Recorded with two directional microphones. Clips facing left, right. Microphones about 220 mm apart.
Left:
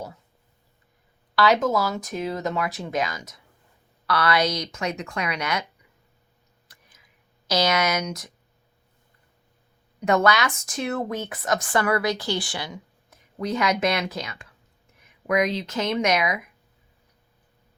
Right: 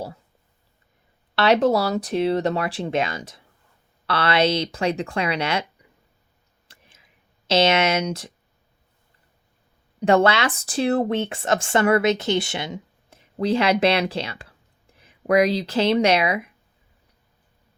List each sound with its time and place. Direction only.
1.4 s speech: 30° right (ahead or behind)
6.7 s clicking: 30° right (ahead or behind)
10.0 s speech: 30° right (ahead or behind)